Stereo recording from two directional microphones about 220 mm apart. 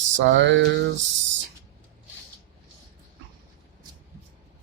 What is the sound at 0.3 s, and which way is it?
Speech, 55° right (ahead or behind).